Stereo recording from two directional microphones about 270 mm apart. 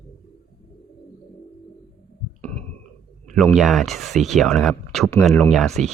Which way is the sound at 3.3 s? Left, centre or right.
Centre.